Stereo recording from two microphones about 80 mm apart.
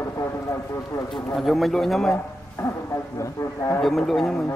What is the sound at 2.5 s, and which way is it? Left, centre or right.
Speech, left.